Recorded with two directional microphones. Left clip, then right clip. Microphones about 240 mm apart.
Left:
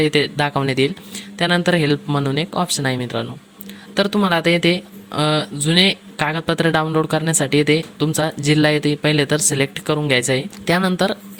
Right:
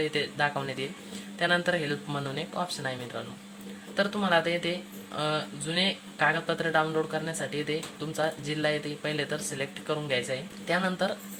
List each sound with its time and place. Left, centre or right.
0.1 s speech: left